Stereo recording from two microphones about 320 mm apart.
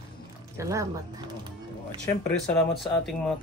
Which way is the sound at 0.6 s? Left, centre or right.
Centre.